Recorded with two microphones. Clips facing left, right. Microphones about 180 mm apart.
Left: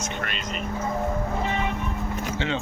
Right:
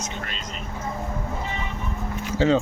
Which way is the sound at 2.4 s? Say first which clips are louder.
Right 11 dB; 40° right (ahead or behind).